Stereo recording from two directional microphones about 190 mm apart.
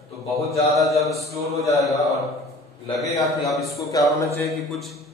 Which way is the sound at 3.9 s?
20° left (ahead or behind).